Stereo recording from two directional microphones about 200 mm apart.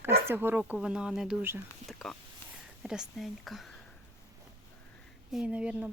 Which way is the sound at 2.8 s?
5° right (ahead or behind).